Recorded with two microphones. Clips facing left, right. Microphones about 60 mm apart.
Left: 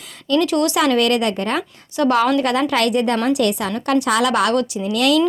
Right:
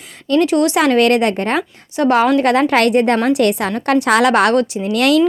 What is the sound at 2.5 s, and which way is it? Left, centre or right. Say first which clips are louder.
A woman's voice: right 5 dB; right.